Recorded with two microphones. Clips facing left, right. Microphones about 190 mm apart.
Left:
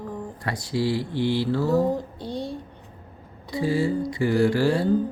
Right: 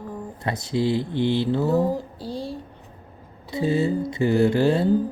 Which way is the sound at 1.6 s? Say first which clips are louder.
Even; 5° right (ahead or behind).